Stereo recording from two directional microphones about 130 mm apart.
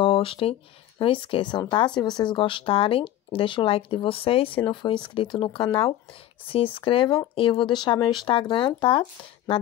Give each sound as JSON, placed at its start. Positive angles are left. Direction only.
{"t": 0.0, "sound": "speech", "side_deg": 45}